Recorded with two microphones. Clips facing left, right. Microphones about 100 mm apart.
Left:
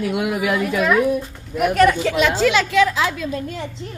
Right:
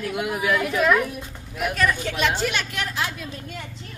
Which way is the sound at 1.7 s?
80° left.